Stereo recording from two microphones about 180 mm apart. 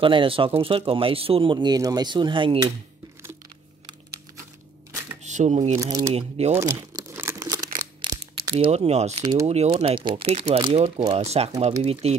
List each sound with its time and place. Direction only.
0.0 s speech: 30° right (ahead or behind)
5.2 s a sound: 40° right (ahead or behind)
5.8 s speech: 20° right (ahead or behind)
6.1 s speech: 35° right (ahead or behind)
7.0 s crumpling: 15° right (ahead or behind)
8.0 s mechanisms: 25° right (ahead or behind)
8.5 s speech: 35° right (ahead or behind)